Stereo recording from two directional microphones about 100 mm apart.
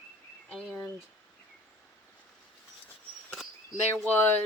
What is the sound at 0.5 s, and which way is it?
Speech, centre (ahead or behind).